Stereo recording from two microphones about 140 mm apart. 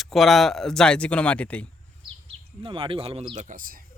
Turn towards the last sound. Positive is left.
turn(degrees=-80)